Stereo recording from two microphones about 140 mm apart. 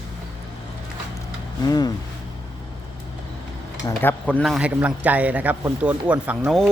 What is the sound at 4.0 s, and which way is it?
Speech, 10° left (ahead or behind).